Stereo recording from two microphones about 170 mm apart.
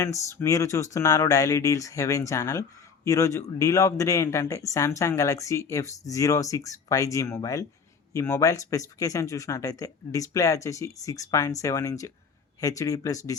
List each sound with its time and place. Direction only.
0.0 s speech: 15° left (ahead or behind)